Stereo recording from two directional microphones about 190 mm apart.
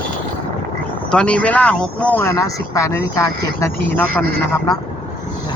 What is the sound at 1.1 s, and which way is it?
Speech, 5° left (ahead or behind).